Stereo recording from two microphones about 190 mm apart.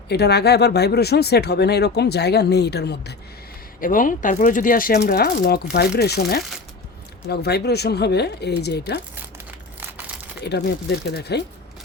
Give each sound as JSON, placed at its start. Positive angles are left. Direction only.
{"t": 0.1, "sound": "speech", "side_deg": 60}
{"t": 3.8, "sound": "speech", "side_deg": 45}
{"t": 10.4, "sound": "speech", "side_deg": 60}